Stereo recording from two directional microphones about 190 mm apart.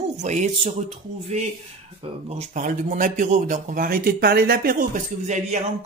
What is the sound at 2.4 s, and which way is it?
A man's voice, 45° right (ahead or behind).